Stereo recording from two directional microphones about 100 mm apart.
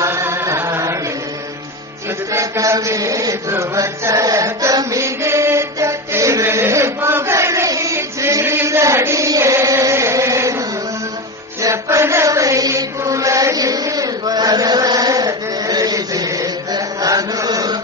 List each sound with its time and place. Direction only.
0.0 s chant: 25° right (ahead or behind)
2.3 s chant: 30° right (ahead or behind)
11.6 s chant: 30° right (ahead or behind)